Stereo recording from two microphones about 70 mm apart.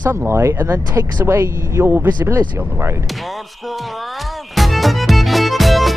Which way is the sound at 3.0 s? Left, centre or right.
Centre.